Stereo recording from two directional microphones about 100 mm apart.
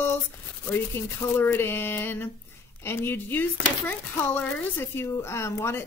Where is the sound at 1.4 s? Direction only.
20° left (ahead or behind).